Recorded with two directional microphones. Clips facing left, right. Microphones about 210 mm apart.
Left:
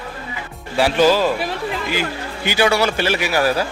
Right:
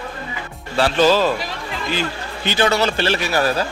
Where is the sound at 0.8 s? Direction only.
10° left (ahead or behind).